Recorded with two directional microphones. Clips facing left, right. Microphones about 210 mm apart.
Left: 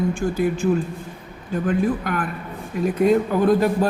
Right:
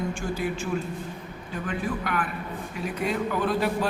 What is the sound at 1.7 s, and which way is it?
A man's voice, 40° left (ahead or behind).